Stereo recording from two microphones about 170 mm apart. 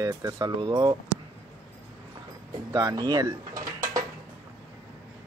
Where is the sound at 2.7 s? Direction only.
20° right (ahead or behind).